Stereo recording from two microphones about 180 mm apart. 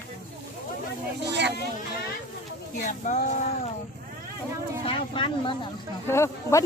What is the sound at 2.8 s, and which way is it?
Speech, 45° left (ahead or behind).